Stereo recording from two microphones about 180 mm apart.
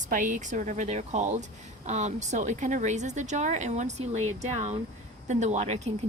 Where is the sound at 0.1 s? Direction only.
45° right (ahead or behind).